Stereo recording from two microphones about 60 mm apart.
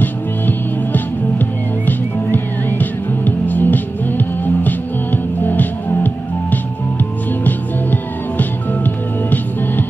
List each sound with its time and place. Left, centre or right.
0.0 s music: left